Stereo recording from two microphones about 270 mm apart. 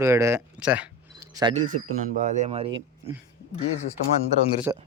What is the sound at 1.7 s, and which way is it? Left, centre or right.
Speech, right.